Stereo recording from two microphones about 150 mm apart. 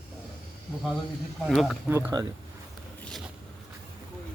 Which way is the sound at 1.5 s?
Centre (ahead or behind).